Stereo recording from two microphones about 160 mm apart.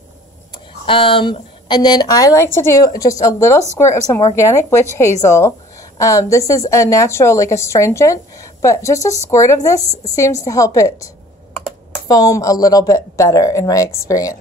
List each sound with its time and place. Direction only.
0.8 s a woman's voice: 35° left (ahead or behind)
12.1 s a woman's voice: 20° left (ahead or behind)